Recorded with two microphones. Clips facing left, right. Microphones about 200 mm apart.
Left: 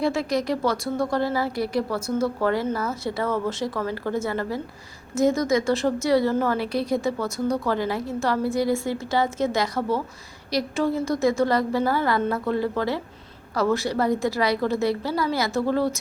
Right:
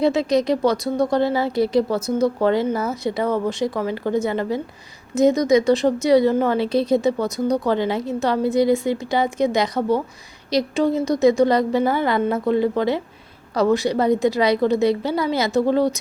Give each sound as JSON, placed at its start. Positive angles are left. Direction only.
{"t": 0.0, "sound": "a woman's voice", "side_deg": -20}